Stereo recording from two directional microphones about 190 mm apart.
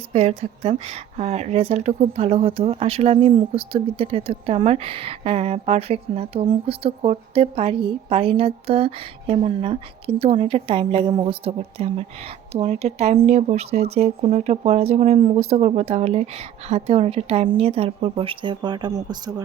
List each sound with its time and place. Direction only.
0.1 s speech: 35° right (ahead or behind); by 19.3 s 20° right (ahead or behind)